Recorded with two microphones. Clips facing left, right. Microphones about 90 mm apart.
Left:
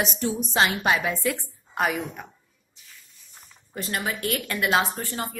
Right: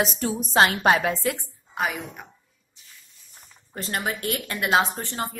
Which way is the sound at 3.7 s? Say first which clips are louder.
Right 1 dB; 35° right (ahead or behind).